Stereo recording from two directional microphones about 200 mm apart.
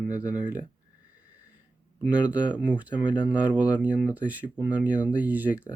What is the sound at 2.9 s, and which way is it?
Speech, 20° left (ahead or behind).